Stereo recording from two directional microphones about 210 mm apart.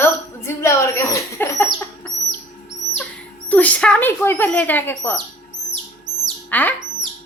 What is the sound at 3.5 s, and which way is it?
Speech, 5° left (ahead or behind).